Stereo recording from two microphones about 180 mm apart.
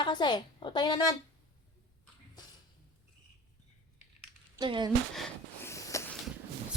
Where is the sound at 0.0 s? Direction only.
25° left (ahead or behind).